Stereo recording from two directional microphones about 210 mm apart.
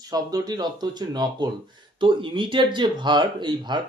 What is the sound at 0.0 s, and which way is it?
Speech, 20° right (ahead or behind).